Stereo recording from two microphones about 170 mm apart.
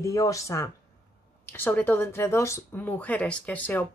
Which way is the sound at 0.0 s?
20° left (ahead or behind).